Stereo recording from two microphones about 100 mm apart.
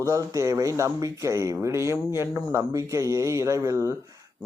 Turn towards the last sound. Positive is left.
turn(degrees=-30)  # may be behind; listen again after turning